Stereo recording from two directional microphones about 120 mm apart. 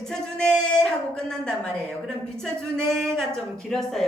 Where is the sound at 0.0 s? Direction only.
5° left (ahead or behind).